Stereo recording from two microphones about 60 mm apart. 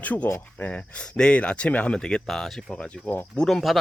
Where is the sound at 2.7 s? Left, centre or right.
Centre.